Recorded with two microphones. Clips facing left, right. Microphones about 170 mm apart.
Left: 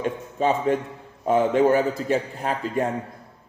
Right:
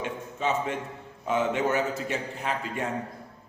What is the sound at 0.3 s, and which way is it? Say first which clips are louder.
A man's voice: left 7 dB; 35° left (ahead or behind).